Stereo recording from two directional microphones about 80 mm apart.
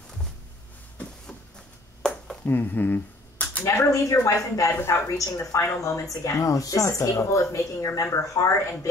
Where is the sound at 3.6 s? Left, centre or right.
Left.